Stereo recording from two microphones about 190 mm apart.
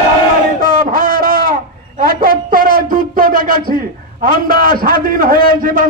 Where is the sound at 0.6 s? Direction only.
45° right (ahead or behind).